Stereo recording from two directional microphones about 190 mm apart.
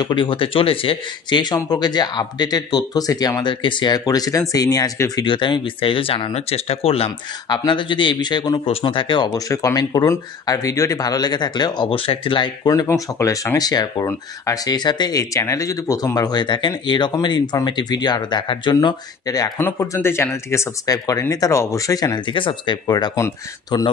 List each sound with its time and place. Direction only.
0.0 s speech: 25° left (ahead or behind)